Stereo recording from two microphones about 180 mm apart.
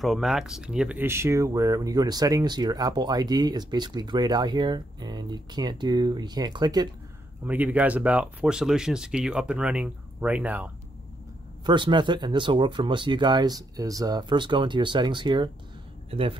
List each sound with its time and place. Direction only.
0.0 s speech: centre (ahead or behind); by 6.9 s 20° right (ahead or behind)
7.4 s speech: 10° right (ahead or behind)
11.6 s speech: 25° right (ahead or behind)